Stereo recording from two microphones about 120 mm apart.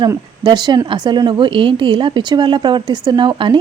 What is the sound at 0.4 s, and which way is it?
A woman's voice, 35° right (ahead or behind).